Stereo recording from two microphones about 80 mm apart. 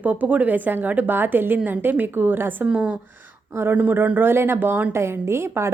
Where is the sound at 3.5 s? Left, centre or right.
Right.